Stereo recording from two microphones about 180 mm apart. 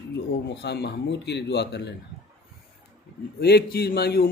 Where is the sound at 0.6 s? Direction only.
70° left (ahead or behind).